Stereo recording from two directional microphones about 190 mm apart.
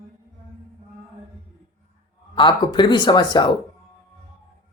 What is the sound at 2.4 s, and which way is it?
Speech, 25° left (ahead or behind).